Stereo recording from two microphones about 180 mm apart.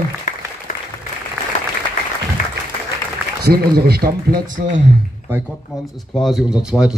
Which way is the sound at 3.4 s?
60° right (ahead or behind).